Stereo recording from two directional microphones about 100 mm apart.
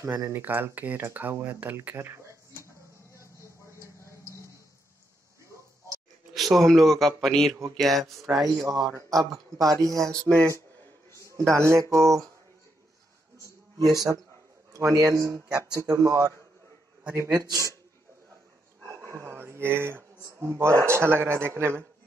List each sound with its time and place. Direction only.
0.2 s speech: 20° right (ahead or behind)
3.3 s chopping: 30° left (ahead or behind)
6.3 s speech: centre (ahead or behind)
8.9 s speech: 35° right (ahead or behind)
10.1 s speech: 10° left (ahead or behind)
11.2 s speech: 30° right (ahead or behind)
13.4 s a sound: 35° right (ahead or behind)
14.7 s speech: 35° right (ahead or behind)
18.9 s speech: 25° right (ahead or behind)